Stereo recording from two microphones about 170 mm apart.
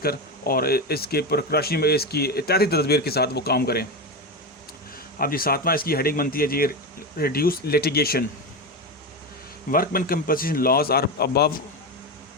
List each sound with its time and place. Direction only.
0.0 s speech: 60° left (ahead or behind)
5.2 s a man's voice: 60° left (ahead or behind)
9.6 s a man's voice: 60° left (ahead or behind)